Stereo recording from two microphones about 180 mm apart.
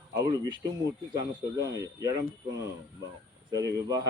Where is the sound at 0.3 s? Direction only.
25° right (ahead or behind).